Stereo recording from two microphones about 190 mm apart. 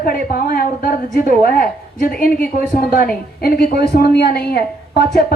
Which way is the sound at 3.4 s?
55° left (ahead or behind).